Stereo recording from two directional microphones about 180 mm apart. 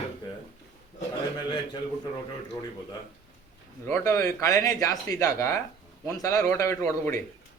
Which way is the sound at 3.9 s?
15° left (ahead or behind).